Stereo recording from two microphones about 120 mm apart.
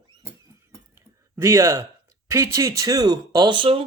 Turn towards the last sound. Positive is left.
turn(degrees=-45)  # may be behind; listen again after turning